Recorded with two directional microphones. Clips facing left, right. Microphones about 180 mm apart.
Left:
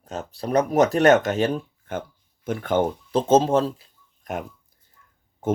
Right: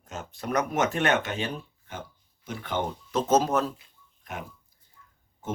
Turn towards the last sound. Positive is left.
turn(degrees=50)  # may be behind; listen again after turning